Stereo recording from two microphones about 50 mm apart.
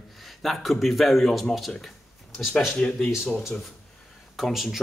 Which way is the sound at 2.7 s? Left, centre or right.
Centre.